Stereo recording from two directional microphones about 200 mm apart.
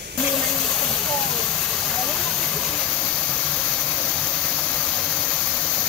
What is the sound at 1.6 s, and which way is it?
Vehicle, 5° left (ahead or behind).